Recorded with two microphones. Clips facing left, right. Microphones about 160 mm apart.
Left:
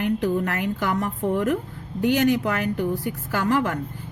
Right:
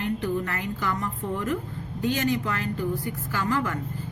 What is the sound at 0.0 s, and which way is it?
A woman's voice, 90° left.